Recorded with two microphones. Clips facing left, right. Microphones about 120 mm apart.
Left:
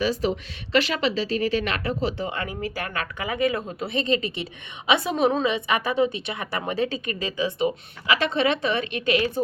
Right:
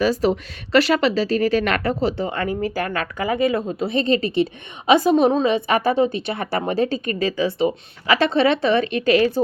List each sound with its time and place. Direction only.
0.0 s speech: 40° right (ahead or behind)